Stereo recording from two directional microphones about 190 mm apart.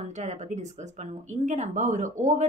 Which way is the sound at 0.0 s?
35° right (ahead or behind).